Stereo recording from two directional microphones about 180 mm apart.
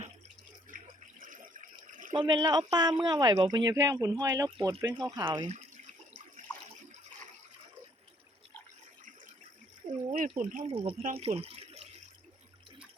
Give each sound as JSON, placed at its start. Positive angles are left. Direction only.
{"t": 0.7, "sound": "water", "side_deg": -50}
{"t": 1.9, "sound": "a sound", "side_deg": -45}
{"t": 2.1, "sound": "speech", "side_deg": -25}
{"t": 5.5, "sound": "water", "side_deg": -40}
{"t": 10.0, "sound": "a sound", "side_deg": -40}
{"t": 10.5, "sound": "speech", "side_deg": -40}
{"t": 10.8, "sound": "speech", "side_deg": -30}